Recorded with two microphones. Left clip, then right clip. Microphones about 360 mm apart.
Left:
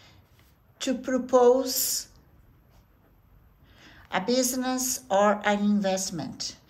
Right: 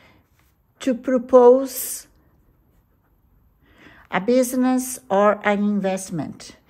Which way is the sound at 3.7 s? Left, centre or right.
Centre.